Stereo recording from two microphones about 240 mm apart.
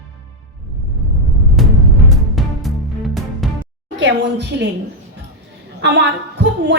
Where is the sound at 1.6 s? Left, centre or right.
Centre.